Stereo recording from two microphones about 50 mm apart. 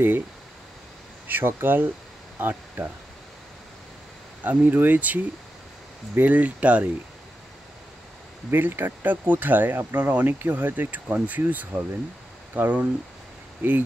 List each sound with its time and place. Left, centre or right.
1.2 s speech: right
4.4 s speech: right
8.5 s speech: right